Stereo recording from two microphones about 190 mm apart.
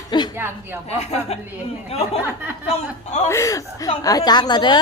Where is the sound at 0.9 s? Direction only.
35° left (ahead or behind).